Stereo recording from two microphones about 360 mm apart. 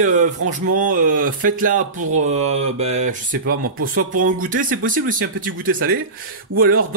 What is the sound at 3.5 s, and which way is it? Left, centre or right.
Speech, right.